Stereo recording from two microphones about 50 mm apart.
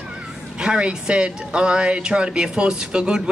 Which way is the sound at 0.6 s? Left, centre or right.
Centre.